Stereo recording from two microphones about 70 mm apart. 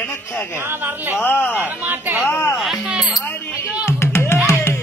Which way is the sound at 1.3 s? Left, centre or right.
Left.